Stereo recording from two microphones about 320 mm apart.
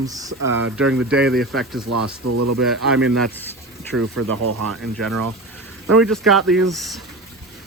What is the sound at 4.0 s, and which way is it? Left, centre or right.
Speech, right.